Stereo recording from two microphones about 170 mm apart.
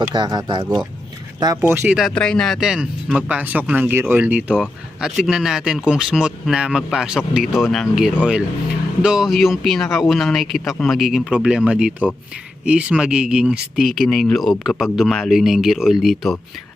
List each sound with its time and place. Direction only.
0.0 s speech: 25° right (ahead or behind)
2.0 s speech: 5° left (ahead or behind)